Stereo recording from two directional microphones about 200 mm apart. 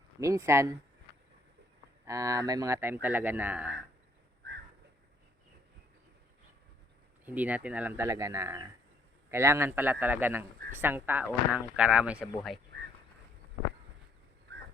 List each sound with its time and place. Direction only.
0.2 s speech: 15° right (ahead or behind)
2.0 s speech: 15° right (ahead or behind)
7.3 s speech: 5° right (ahead or behind)